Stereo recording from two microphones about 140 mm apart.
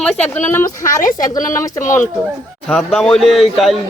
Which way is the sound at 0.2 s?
60° left (ahead or behind).